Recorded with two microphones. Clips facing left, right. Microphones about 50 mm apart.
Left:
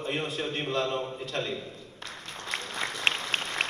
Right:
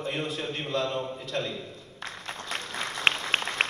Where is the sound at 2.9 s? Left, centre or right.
Right.